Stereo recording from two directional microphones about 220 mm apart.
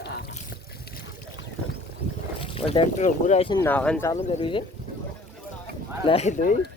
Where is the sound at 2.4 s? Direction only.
25° left (ahead or behind).